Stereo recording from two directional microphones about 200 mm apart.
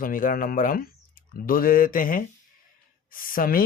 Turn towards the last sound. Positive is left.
turn(degrees=45)  # may be behind; listen again after turning